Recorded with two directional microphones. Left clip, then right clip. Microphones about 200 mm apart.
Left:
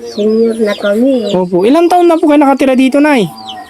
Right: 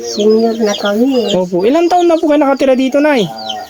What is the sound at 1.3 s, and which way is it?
Speech, 20° left (ahead or behind).